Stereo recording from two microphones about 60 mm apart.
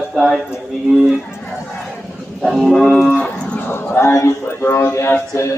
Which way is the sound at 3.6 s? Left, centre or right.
Left.